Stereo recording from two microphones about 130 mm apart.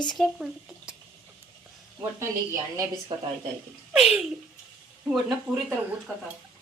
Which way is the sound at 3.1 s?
35° right (ahead or behind).